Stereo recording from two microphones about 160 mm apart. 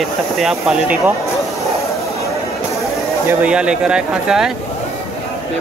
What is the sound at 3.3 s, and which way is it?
Speech, 10° right (ahead or behind).